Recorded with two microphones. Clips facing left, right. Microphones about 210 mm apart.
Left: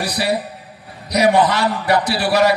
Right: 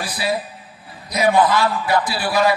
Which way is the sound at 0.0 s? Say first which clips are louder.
Left 3 dB; 70° left (ahead or behind).